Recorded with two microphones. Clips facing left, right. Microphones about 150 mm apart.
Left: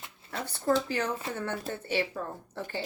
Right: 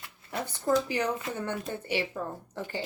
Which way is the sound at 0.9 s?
15° right (ahead or behind).